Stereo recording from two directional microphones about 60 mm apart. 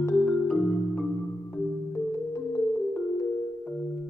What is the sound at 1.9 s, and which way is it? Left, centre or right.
Music, left.